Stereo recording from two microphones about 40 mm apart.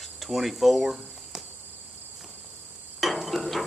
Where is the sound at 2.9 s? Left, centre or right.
Centre.